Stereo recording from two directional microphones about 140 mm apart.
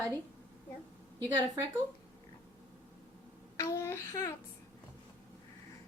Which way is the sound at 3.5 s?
20° left (ahead or behind).